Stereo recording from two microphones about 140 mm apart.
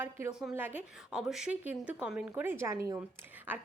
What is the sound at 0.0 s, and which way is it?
A woman's voice, 15° right (ahead or behind).